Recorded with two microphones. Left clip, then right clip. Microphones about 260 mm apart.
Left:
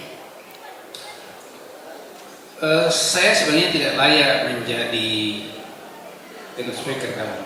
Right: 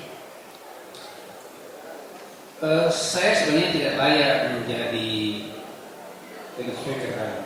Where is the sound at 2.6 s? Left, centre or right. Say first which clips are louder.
Left 3 dB; centre.